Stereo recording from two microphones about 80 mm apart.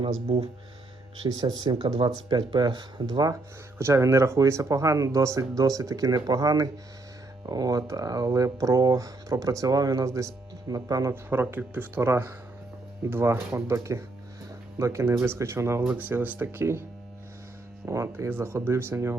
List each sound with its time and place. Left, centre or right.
1.4 s speech: right
2.0 s speech: right
3.8 s speech: right
11.1 s speech: right
15.9 s speech: right
17.8 s speech: right